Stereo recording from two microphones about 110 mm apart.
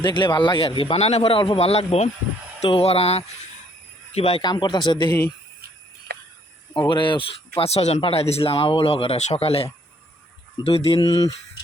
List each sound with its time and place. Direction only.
0.0 s speech: 45° left (ahead or behind); by 4.4 s 65° left (ahead or behind)
4.4 s speech: 40° left (ahead or behind)
6.7 s speech: 45° left (ahead or behind); by 11.0 s 60° left (ahead or behind)
11.0 s speech: 30° left (ahead or behind)